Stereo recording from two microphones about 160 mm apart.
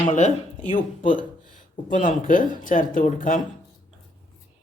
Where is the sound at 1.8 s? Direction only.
55° left (ahead or behind).